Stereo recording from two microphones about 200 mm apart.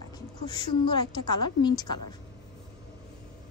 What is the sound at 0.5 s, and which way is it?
A woman's voice, 20° left (ahead or behind).